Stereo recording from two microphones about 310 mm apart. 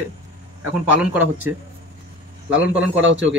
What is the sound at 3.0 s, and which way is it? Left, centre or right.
Speech, right.